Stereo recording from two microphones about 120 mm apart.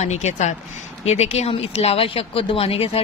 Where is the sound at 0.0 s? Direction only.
70° left (ahead or behind).